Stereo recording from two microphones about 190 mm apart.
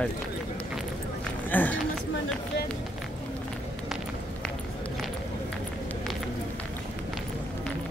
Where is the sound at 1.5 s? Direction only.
10° left (ahead or behind).